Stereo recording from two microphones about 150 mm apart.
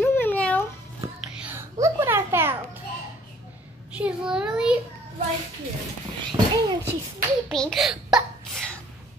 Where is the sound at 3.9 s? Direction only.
5° right (ahead or behind).